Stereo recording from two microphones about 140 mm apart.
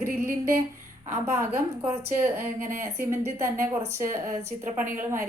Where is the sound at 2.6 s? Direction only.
75° right (ahead or behind).